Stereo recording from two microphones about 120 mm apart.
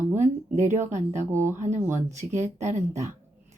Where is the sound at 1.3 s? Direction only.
20° right (ahead or behind).